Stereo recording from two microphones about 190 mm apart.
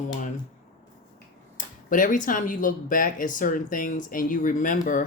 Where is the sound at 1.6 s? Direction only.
45° left (ahead or behind).